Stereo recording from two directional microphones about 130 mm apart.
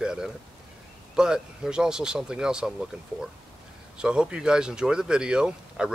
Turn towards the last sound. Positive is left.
turn(degrees=-5)  # may be behind; listen again after turning